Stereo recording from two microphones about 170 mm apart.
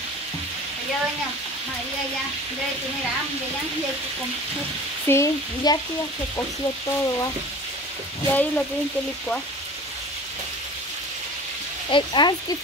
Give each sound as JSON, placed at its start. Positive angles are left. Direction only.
{"t": 5.0, "sound": "speech", "side_deg": 15}
{"t": 8.3, "sound": "speech", "side_deg": 10}
{"t": 11.9, "sound": "speech", "side_deg": 25}